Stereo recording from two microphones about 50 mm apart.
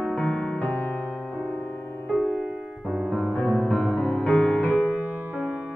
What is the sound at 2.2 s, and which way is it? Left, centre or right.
Music, right.